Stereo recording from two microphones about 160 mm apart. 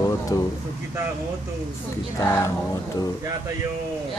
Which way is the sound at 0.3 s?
25° left (ahead or behind).